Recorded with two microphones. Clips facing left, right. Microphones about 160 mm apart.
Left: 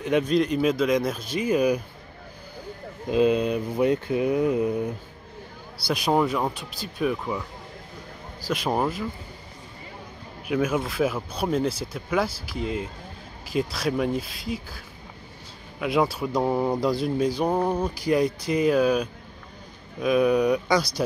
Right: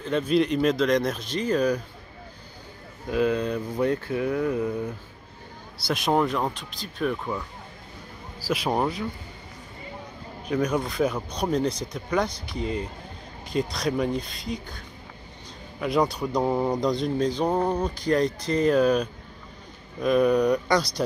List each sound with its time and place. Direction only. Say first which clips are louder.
0.3 s speech: even; centre (ahead or behind)
3.1 s speech: left 3 dB; 20° left (ahead or behind)
5.9 s speech: left 1 dB; centre (ahead or behind)
8.5 s speech: even; centre (ahead or behind)
10.5 s speech: left 1 dB; 5° left (ahead or behind)
15.8 s speech: even; centre (ahead or behind)